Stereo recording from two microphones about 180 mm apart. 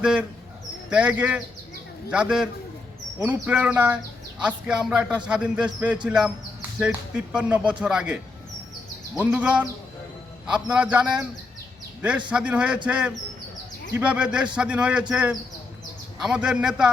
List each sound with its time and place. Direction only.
0.0 s a man's voice: 5° right (ahead or behind)
12.3 s a man's voice: 5° right (ahead or behind)